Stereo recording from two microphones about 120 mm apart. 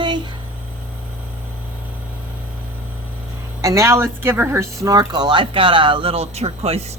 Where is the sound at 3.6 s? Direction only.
25° right (ahead or behind); by 6.8 s 60° right (ahead or behind).